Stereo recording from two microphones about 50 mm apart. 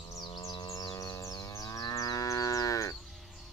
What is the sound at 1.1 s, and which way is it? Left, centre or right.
Livestock, left.